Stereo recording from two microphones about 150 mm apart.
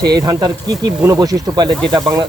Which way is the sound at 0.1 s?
25° right (ahead or behind).